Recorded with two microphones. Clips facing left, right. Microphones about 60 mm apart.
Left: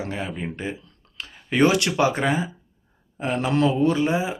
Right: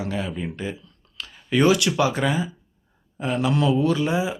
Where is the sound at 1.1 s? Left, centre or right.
Left.